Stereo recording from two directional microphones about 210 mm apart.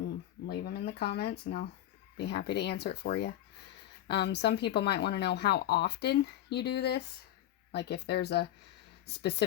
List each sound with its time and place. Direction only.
0.4 s speech: 50° left (ahead or behind)